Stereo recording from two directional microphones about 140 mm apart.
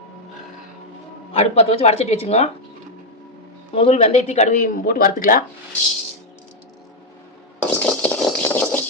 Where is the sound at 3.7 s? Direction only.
50° left (ahead or behind); by 5.4 s 85° left.